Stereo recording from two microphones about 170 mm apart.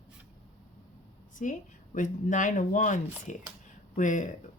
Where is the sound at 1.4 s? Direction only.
45° left (ahead or behind).